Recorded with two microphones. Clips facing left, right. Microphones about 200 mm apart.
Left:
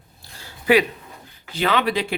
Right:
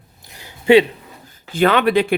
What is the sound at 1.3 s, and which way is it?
Speech, 50° right (ahead or behind).